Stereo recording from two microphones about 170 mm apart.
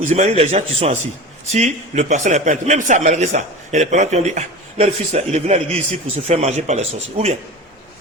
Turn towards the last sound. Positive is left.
turn(degrees=-40)  # may be behind; listen again after turning